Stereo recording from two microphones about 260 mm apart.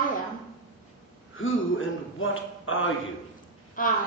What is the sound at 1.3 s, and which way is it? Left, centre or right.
A man's voice, left.